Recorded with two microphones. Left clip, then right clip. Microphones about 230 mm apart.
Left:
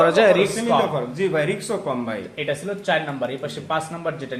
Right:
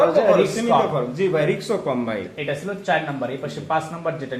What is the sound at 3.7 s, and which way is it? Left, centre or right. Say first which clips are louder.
Speech: right 2 dB; centre.